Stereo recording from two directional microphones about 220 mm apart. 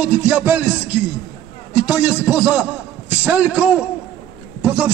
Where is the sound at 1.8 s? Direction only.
5° right (ahead or behind).